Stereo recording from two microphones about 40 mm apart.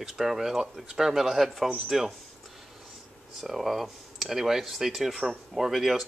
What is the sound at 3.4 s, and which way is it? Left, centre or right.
Speech, centre.